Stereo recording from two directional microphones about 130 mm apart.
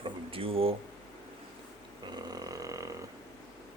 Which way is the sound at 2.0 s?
30° right (ahead or behind).